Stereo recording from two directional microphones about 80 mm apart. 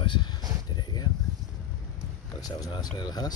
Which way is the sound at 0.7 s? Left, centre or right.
Left.